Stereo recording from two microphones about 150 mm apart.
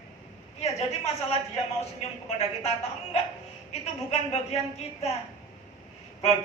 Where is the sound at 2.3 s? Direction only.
45° left (ahead or behind).